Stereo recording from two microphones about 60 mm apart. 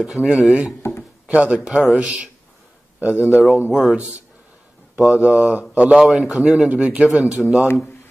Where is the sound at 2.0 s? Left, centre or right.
Right.